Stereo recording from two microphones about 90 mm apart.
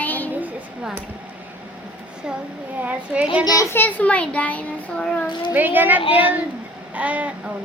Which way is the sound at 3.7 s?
20° left (ahead or behind).